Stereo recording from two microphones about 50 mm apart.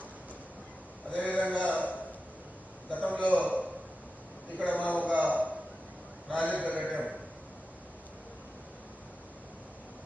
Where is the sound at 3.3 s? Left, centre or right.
Right.